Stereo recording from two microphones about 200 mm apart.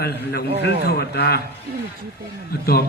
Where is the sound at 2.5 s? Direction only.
50° left (ahead or behind).